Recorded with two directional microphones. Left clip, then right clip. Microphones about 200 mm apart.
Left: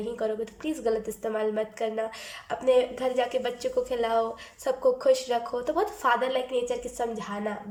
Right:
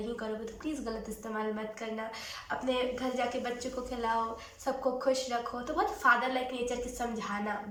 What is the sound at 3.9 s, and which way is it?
A woman's voice, 45° left (ahead or behind).